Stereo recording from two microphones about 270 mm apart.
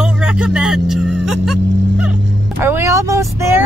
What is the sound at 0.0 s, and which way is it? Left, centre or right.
Vehicle, centre.